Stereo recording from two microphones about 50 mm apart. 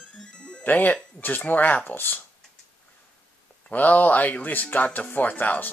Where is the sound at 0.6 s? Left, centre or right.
Left.